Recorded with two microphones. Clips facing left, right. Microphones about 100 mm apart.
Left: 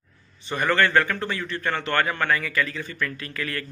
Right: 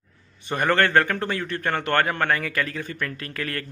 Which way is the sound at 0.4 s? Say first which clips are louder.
Right 1 dB; 50° right (ahead or behind).